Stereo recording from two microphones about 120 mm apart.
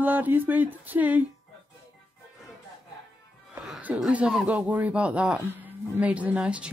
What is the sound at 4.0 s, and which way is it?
A woman's voice, 5° right (ahead or behind).